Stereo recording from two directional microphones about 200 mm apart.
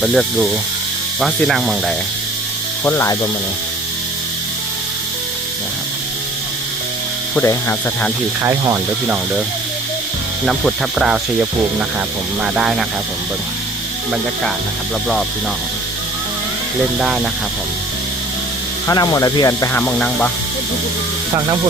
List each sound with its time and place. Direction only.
0.0 s speech: centre (ahead or behind)
2.8 s speech: 10° left (ahead or behind)
7.3 s speech: 10° left (ahead or behind)
8.4 s speech: 15° right (ahead or behind)
10.4 s speech: centre (ahead or behind)
18.9 s speech: 20° left (ahead or behind)